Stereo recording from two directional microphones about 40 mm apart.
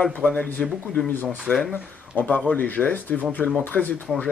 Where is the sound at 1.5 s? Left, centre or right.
Left.